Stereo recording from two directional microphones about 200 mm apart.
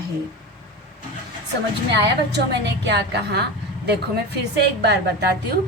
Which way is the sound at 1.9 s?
55° right (ahead or behind).